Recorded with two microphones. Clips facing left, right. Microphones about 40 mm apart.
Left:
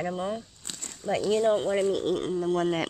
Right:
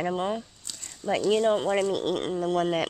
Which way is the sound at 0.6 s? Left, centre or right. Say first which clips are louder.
Left 2 dB; left.